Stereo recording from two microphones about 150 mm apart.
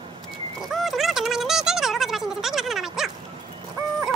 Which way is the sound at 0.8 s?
Centre (ahead or behind).